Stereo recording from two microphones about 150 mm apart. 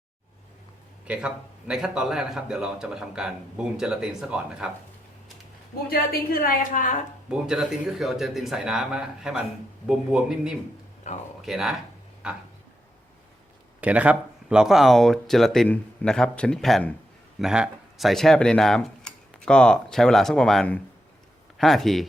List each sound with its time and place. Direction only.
1.0 s a man's voice: 5° right (ahead or behind)
5.9 s a woman's voice: 80° left; by 7.0 s 60° left (ahead or behind)
7.3 s a man's voice: 5° right (ahead or behind)
11.1 s speech: 50° left (ahead or behind)
11.4 s a man's voice: centre (ahead or behind)
13.8 s a man's voice: 10° right (ahead or behind)